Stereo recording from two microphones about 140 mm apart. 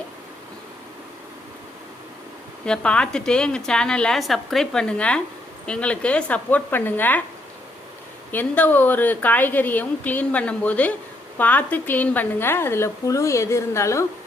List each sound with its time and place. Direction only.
2.6 s a woman's voice: 5° left (ahead or behind)
8.3 s a woman's voice: 10° left (ahead or behind)